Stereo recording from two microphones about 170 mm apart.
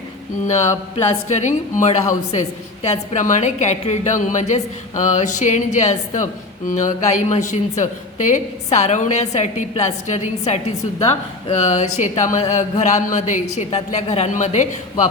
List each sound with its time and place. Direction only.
0.4 s speech: 40° left (ahead or behind)